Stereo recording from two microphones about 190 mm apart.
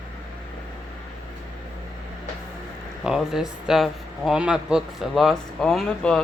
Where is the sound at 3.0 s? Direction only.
5° right (ahead or behind).